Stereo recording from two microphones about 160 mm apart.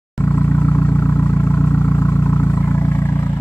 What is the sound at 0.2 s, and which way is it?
Vehicle, 15° left (ahead or behind).